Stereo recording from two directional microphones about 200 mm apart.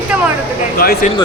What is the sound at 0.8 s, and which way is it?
Speech, 50° left (ahead or behind).